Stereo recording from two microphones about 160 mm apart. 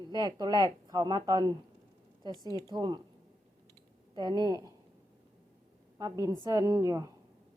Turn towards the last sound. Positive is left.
turn(degrees=-20)  # may be behind; listen again after turning